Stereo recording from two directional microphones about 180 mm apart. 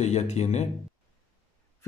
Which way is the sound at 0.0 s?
40° left (ahead or behind).